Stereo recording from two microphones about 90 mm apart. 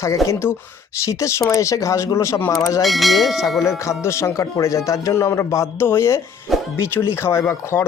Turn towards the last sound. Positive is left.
turn(degrees=30)  # may be behind; listen again after turning